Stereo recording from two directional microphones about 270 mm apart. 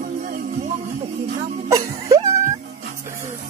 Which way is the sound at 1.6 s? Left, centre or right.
Centre.